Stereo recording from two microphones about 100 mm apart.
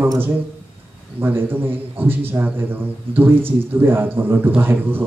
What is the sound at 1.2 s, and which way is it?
A man's voice, 20° right (ahead or behind).